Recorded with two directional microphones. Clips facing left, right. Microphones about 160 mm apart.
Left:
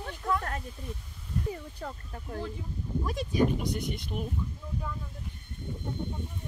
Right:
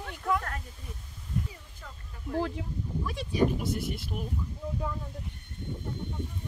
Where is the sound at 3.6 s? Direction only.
5° right (ahead or behind).